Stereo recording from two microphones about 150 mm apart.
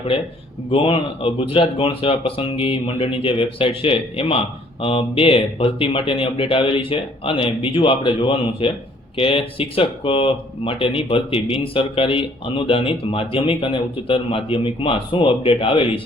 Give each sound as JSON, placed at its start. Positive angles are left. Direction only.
{"t": 0.7, "sound": "speech", "side_deg": 35}